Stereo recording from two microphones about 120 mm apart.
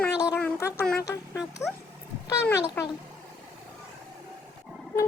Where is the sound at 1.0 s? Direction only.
25° left (ahead or behind).